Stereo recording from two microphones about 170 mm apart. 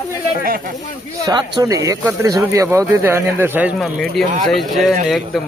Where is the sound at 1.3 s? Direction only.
25° right (ahead or behind).